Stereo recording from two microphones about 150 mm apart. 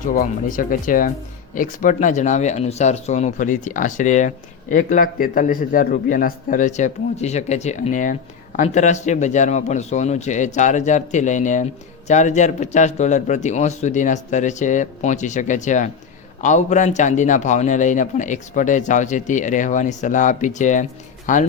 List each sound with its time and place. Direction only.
0.0 s a man's voice: 65° left (ahead or behind)